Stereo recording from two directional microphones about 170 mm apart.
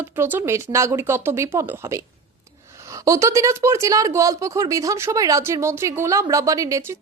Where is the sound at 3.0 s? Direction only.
20° right (ahead or behind).